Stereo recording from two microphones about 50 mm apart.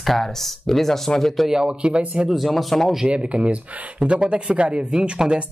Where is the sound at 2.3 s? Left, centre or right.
Centre.